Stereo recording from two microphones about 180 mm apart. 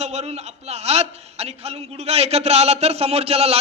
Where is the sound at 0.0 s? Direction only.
35° right (ahead or behind).